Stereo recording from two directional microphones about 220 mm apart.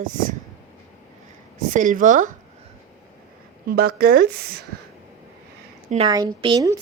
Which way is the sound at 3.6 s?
45° right (ahead or behind).